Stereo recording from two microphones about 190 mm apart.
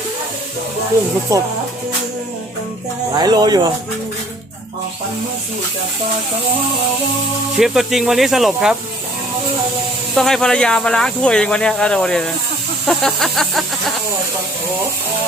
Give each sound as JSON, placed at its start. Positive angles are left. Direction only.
{"t": 1.3, "sound": "speech", "side_deg": -15}
{"t": 3.1, "sound": "speech", "side_deg": -20}
{"t": 7.5, "sound": "speech", "side_deg": 0}
{"t": 10.2, "sound": "speech", "side_deg": 0}
{"t": 12.9, "sound": "a sound", "side_deg": 0}